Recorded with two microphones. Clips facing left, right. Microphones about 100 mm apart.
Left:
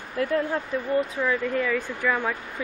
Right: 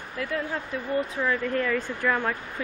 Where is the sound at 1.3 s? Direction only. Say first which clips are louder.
Right 1 dB; 10° left (ahead or behind).